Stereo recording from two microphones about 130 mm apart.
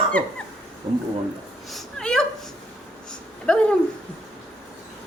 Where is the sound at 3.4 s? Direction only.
5° left (ahead or behind).